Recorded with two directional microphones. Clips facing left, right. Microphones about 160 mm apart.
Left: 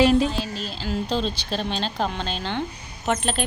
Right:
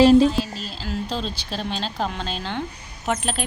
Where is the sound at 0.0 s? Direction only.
35° right (ahead or behind).